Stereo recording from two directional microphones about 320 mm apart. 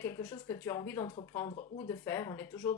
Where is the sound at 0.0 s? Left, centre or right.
Centre.